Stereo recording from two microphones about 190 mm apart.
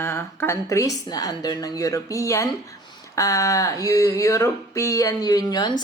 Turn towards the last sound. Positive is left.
turn(degrees=20)  # may be behind; listen again after turning